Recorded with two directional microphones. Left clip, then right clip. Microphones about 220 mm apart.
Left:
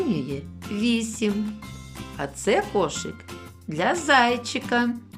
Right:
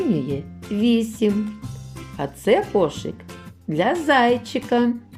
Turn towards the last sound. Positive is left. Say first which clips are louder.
# right 3 dB
turn(degrees=5)  # may be behind; listen again after turning